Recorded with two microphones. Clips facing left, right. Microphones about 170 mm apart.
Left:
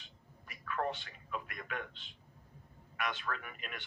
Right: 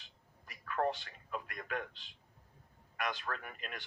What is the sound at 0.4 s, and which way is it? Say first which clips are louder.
A man's voice: right 2 dB; 40° right (ahead or behind).